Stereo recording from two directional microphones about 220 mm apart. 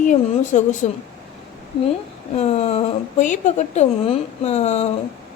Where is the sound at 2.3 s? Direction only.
30° left (ahead or behind).